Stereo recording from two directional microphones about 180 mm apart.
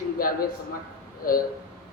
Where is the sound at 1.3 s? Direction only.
55° left (ahead or behind).